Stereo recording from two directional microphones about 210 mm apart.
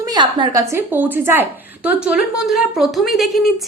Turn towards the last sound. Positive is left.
turn(degrees=0)  # may be behind; listen again after turning